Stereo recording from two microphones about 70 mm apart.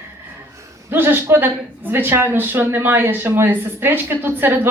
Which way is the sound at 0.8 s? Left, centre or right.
Right.